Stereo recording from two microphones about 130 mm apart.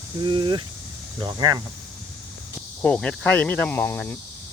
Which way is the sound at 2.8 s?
10° left (ahead or behind).